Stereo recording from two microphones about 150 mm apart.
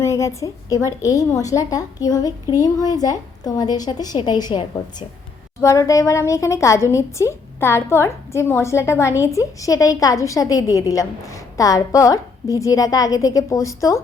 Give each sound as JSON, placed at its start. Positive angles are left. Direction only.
{"t": 0.0, "sound": "a woman's voice", "side_deg": 20}